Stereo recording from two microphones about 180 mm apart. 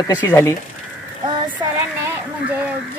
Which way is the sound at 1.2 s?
20° right (ahead or behind).